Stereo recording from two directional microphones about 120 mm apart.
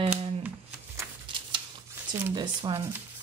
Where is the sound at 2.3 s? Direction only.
40° right (ahead or behind).